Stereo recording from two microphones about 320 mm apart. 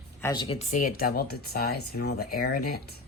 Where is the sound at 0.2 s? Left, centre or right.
Centre; by 2.8 s left.